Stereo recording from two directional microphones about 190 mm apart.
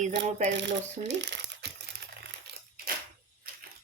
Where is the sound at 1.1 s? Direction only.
65° right (ahead or behind).